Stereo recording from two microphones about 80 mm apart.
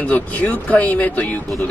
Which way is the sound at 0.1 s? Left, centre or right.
Centre.